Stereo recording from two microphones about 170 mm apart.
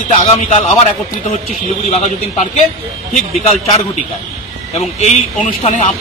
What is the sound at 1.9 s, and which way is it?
Speech, 40° left (ahead or behind).